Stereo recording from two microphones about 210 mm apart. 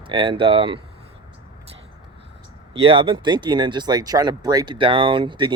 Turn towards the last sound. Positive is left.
turn(degrees=-20)  # may be behind; listen again after turning